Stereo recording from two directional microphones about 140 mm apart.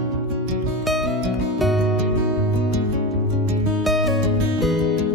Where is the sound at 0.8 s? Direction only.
Centre (ahead or behind).